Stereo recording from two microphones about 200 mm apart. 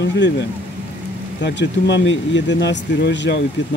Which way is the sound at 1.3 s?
60° left (ahead or behind).